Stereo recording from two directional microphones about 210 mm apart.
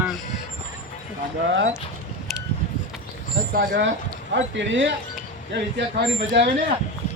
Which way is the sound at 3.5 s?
55° right (ahead or behind).